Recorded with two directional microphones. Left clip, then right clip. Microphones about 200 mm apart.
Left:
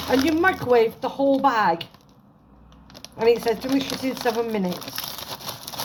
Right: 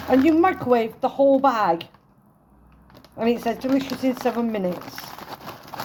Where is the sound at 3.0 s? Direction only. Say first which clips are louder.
Left 4 dB; 50° right (ahead or behind).